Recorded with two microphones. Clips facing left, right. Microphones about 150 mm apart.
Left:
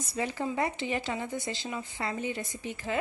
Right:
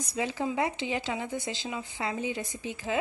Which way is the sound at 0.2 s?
5° right (ahead or behind).